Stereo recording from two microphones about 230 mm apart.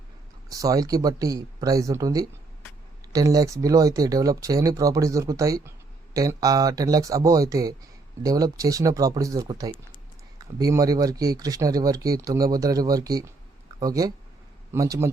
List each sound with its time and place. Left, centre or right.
0.5 s speech: centre